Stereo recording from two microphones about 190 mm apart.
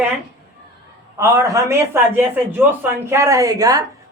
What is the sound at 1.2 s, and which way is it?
Speech, 15° right (ahead or behind).